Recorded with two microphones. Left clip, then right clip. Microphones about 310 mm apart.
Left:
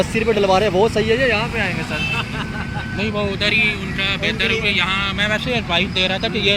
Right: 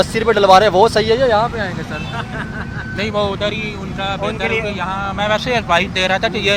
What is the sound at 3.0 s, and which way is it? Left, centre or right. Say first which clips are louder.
Speech: right 4 dB; right.